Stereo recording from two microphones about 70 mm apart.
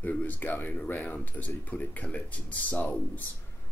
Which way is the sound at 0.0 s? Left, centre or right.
Left.